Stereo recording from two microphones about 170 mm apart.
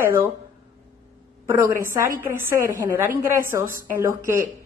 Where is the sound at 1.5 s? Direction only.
15° right (ahead or behind).